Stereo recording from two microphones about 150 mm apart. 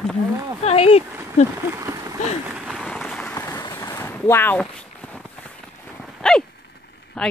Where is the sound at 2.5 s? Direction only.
Centre (ahead or behind).